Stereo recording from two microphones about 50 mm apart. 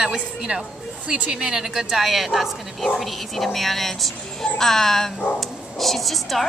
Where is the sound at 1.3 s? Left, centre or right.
Centre.